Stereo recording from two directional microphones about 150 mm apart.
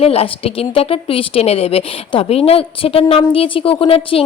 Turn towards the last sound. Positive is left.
turn(degrees=40)  # may be behind; listen again after turning